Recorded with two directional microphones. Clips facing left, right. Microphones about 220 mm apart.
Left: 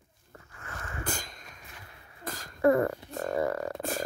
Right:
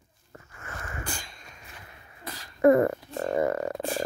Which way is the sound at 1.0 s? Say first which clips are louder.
Left 2 dB; 45° left (ahead or behind).